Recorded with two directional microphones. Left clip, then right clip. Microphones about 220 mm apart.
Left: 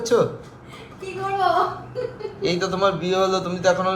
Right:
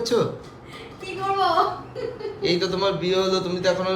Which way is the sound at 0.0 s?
5° right (ahead or behind).